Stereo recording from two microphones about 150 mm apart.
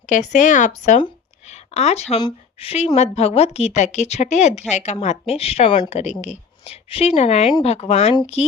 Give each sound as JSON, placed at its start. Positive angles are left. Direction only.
{"t": 0.1, "sound": "speech", "side_deg": 55}
{"t": 1.5, "sound": "a sound", "side_deg": 45}
{"t": 2.2, "sound": "a woman's voice", "side_deg": 40}